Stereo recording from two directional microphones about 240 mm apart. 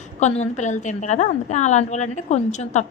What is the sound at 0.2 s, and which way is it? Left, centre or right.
A woman's voice, left.